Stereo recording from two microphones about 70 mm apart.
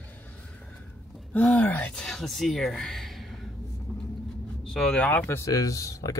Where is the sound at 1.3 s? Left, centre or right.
Left.